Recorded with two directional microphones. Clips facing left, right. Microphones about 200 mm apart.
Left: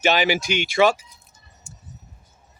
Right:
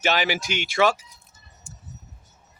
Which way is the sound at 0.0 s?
15° left (ahead or behind).